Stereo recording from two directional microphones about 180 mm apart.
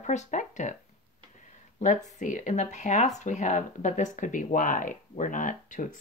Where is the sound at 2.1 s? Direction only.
45° left (ahead or behind).